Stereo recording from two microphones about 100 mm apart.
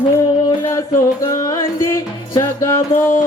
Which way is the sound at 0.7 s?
30° left (ahead or behind).